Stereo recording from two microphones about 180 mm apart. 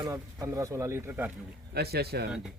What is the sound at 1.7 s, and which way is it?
Speech, 60° right (ahead or behind).